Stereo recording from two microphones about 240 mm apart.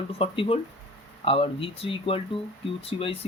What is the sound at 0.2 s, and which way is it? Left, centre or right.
Speech, left.